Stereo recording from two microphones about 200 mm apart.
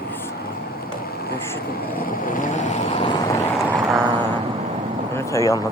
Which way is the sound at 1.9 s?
45° left (ahead or behind).